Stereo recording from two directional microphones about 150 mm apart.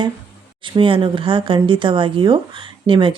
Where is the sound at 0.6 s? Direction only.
35° right (ahead or behind).